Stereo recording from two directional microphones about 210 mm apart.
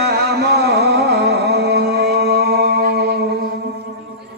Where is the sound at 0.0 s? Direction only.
50° right (ahead or behind).